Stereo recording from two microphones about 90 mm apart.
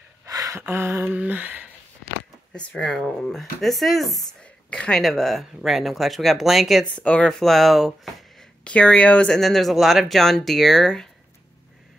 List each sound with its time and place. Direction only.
0.2 s a sound: 40° right (ahead or behind)
0.6 s a sound: 25° right (ahead or behind)
2.7 s speech: 10° left (ahead or behind)
5.0 s speech: centre (ahead or behind)
7.0 s speech: 10° left (ahead or behind)
8.6 s speech: 15° left (ahead or behind)
9.4 s speech: 5° left (ahead or behind)